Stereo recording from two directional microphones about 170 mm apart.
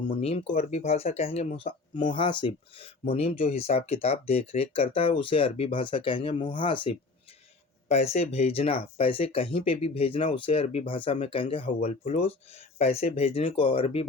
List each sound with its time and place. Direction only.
0.1 s speech: 35° left (ahead or behind)
7.9 s speech: 40° left (ahead or behind)